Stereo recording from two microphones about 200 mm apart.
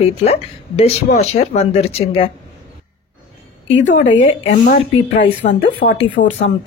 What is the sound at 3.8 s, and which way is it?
A woman's voice, 40° left (ahead or behind).